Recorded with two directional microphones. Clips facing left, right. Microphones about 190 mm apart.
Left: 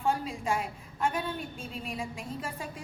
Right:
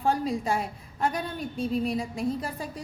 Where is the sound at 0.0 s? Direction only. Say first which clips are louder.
Right 4 dB; 35° right (ahead or behind).